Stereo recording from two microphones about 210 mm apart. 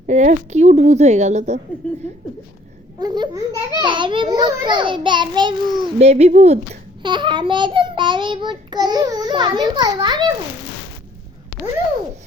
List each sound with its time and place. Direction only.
0.1 s a woman's voice: 35° right (ahead or behind)
3.0 s a child's voice: 20° right (ahead or behind)